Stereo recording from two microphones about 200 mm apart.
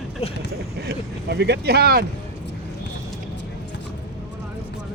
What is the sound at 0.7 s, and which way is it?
Speech, 55° right (ahead or behind).